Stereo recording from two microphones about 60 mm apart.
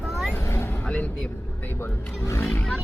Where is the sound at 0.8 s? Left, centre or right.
Left.